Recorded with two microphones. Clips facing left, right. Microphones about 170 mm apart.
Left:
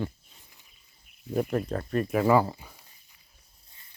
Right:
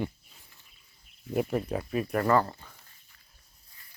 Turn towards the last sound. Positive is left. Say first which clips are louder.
# left 2 dB
turn(degrees=15)  # may be behind; listen again after turning